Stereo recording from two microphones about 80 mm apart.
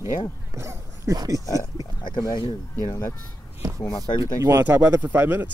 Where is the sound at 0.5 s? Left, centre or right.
Right.